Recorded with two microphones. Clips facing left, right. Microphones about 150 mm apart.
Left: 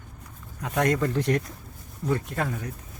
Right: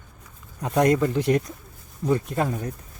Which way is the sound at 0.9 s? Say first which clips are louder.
Right 3 dB; 5° right (ahead or behind).